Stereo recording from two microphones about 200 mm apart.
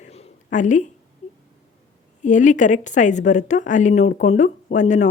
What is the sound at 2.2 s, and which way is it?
A woman's voice, 40° left (ahead or behind).